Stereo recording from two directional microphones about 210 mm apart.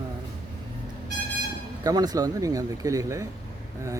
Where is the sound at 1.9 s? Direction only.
20° right (ahead or behind).